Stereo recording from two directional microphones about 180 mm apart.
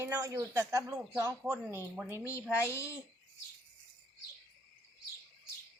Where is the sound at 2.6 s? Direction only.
15° left (ahead or behind).